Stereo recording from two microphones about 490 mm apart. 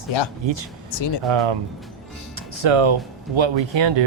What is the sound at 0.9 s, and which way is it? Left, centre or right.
Speech, left.